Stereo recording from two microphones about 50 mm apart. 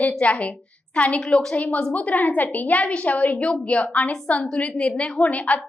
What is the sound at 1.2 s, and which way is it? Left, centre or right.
Speech, centre.